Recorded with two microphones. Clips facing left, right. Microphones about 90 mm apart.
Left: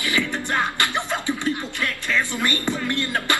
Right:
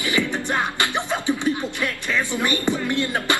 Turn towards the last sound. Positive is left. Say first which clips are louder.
# right 1 dB
turn(degrees=-15)  # may be behind; listen again after turning